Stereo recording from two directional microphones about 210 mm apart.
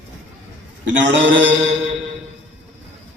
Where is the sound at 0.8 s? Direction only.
60° right (ahead or behind).